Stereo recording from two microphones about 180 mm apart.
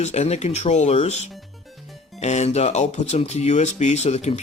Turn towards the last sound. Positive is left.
turn(degrees=40)  # may be behind; listen again after turning